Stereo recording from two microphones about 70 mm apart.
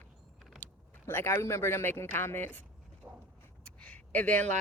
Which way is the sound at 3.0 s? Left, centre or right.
Right.